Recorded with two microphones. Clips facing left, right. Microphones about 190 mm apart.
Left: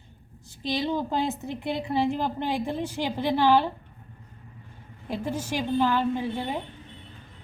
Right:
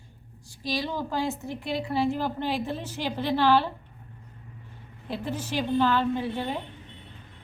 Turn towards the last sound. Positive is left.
turn(degrees=15)  # may be behind; listen again after turning